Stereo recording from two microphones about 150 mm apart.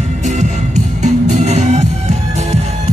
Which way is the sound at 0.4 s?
50° right (ahead or behind).